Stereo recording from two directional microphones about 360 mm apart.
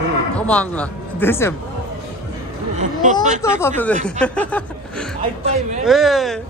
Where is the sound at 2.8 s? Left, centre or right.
Centre.